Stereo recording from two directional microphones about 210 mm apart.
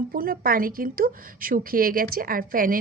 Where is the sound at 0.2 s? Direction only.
45° right (ahead or behind).